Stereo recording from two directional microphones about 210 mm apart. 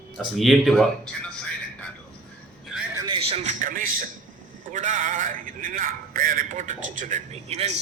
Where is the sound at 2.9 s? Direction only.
20° right (ahead or behind); by 4.1 s 40° right (ahead or behind).